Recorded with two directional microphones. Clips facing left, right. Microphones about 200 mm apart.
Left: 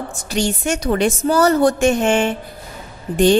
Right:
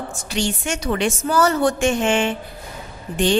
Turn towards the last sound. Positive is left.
turn(degrees=40)  # may be behind; listen again after turning